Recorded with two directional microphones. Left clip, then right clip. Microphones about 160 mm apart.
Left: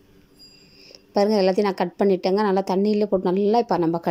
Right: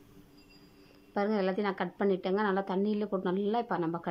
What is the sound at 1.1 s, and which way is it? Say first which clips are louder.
A woman's voice: left 12 dB; 30° left (ahead or behind).